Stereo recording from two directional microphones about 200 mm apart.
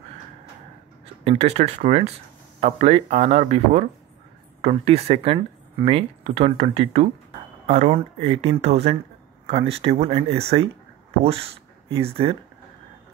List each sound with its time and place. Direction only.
1.2 s speech: 30° right (ahead or behind)